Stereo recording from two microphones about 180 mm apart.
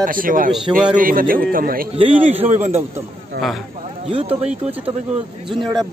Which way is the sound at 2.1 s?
10° right (ahead or behind).